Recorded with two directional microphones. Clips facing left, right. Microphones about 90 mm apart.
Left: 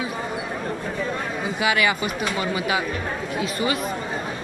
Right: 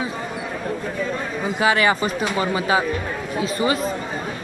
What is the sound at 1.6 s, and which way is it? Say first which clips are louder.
A woman's voice: right 4 dB; 35° right (ahead or behind).